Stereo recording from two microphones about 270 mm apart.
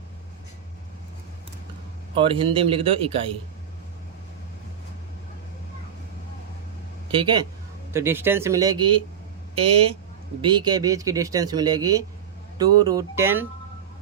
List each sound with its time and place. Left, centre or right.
2.1 s a man's voice: centre
7.1 s a man's voice: centre